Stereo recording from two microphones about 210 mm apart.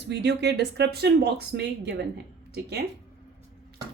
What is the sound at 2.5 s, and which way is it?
Speech, 50° right (ahead or behind).